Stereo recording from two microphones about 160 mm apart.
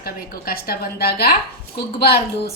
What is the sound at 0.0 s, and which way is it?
A woman's voice, 70° left (ahead or behind).